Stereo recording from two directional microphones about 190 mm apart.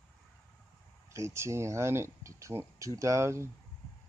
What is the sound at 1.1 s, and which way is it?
Speech, 15° right (ahead or behind).